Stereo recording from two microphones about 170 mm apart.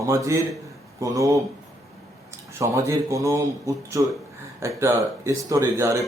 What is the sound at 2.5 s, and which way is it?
Speech, 15° right (ahead or behind).